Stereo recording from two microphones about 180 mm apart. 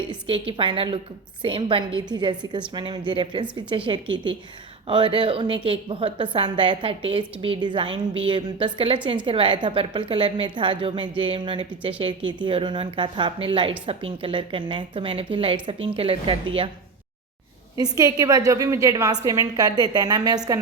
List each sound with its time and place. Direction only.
0.1 s a woman's voice: 30° right (ahead or behind)
17.7 s a woman's voice: 20° right (ahead or behind)